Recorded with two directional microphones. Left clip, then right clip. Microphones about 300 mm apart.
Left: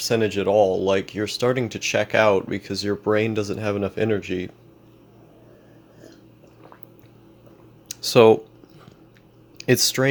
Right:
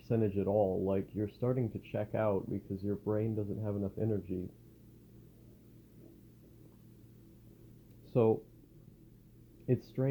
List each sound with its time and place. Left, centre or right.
0.1 s speech: centre
8.1 s speech: left
9.6 s speech: left